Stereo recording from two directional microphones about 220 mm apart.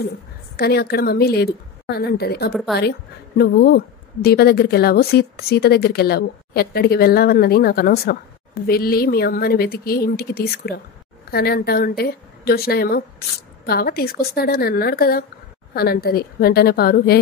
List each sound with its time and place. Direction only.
0.6 s a woman's voice: 45° left (ahead or behind)
2.5 s speech: centre (ahead or behind)
3.3 s a woman's voice: 45° left (ahead or behind)